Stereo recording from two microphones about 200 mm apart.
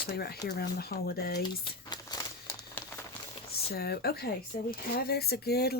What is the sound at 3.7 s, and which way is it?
Speech, 50° left (ahead or behind).